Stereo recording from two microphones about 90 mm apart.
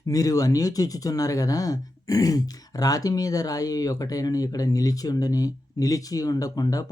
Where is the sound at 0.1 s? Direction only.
40° left (ahead or behind).